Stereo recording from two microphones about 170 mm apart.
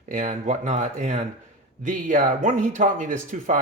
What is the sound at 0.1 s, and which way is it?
Speech, 45° right (ahead or behind).